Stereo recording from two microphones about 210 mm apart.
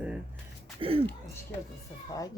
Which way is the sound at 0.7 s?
25° right (ahead or behind).